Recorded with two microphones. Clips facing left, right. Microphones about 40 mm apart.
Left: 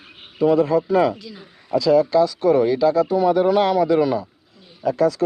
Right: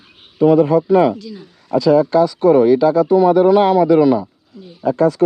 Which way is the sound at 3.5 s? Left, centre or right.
Right.